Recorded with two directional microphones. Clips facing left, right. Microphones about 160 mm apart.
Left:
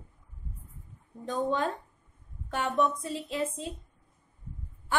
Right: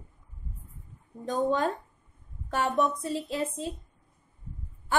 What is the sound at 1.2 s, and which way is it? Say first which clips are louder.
A woman's voice: right 3 dB; 40° right (ahead or behind).